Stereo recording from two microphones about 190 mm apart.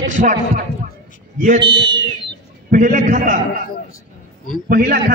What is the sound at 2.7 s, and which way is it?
Speech, 45° right (ahead or behind).